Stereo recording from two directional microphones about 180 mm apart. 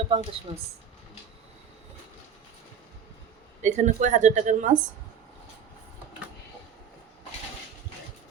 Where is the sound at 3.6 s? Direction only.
40° right (ahead or behind).